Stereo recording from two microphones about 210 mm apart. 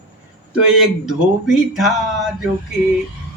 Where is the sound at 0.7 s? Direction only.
Centre (ahead or behind).